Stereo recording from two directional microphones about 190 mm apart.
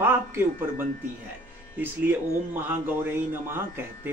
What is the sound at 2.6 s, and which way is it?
Speech, 10° right (ahead or behind).